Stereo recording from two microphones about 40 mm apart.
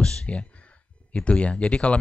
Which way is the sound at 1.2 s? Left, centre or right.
Left.